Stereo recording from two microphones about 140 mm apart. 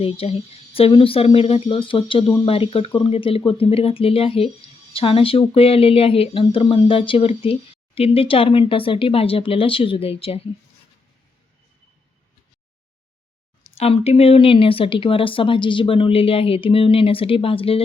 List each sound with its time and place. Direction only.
0.0 s speech: 45° left (ahead or behind)
13.7 s speech: 45° left (ahead or behind)